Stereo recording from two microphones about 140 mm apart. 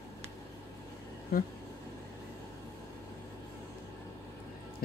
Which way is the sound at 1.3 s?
90° left.